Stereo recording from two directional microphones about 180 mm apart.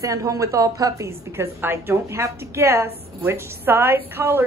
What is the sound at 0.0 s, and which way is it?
A woman's voice, 15° right (ahead or behind).